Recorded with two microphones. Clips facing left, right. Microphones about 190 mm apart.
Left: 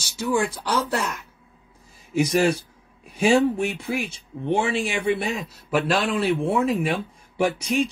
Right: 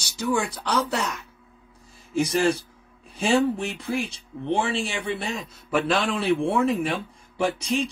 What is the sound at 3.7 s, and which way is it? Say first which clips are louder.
Speech: even; 65° left (ahead or behind).